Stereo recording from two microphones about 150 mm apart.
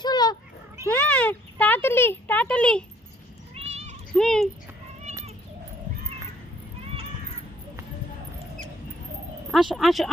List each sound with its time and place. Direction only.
0.0 s cat: 30° left (ahead or behind)
0.9 s a sound: 10° left (ahead or behind)
3.5 s cat: 45° right (ahead or behind)
4.2 s a sound: 5° left (ahead or behind)
5.1 s cat: 50° right (ahead or behind)
9.5 s speech: centre (ahead or behind)